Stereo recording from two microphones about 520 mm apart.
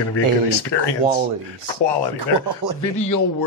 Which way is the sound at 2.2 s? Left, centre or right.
Right.